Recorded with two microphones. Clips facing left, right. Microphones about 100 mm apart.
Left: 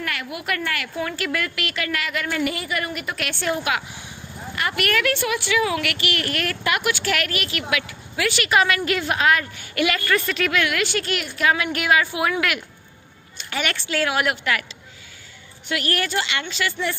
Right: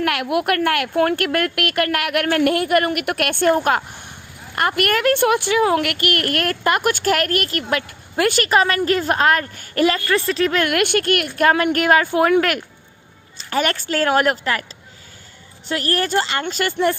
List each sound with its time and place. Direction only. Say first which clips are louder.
0.0 s a woman's voice: right 10 dB; 65° right (ahead or behind); by 10.7 s 35° right (ahead or behind)
10.7 s a woman's voice: right 6 dB; 55° right (ahead or behind); by 14.6 s 40° right (ahead or behind)
15.7 s speech: right 4 dB; 35° right (ahead or behind)